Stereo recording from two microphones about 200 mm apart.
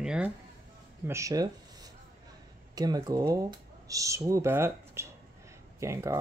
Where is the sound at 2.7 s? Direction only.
20° right (ahead or behind).